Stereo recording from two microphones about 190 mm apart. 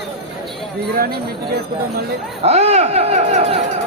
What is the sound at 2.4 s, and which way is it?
Speech, 35° right (ahead or behind).